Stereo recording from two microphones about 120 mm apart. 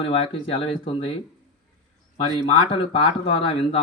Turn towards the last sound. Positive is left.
turn(degrees=50)  # may be behind; listen again after turning